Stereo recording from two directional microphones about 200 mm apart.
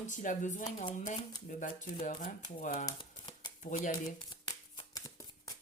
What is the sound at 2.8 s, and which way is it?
Typewriter, 25° left (ahead or behind).